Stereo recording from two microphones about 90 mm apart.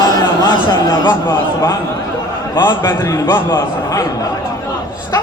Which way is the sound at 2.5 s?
50° left (ahead or behind).